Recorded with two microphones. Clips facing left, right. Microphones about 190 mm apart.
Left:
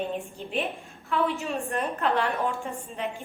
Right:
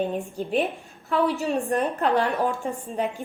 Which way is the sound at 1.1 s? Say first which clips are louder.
Right 4 dB; 40° right (ahead or behind).